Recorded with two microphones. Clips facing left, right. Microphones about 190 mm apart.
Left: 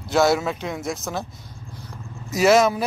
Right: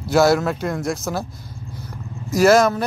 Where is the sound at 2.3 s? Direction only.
Centre (ahead or behind).